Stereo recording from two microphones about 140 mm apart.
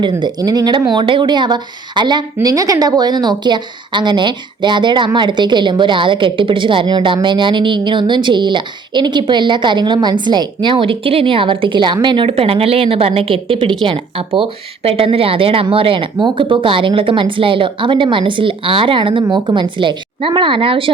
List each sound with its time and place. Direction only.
0.0 s speech: 30° right (ahead or behind)